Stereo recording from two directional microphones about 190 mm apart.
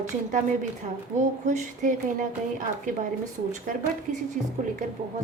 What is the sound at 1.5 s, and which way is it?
A woman's voice, 40° right (ahead or behind).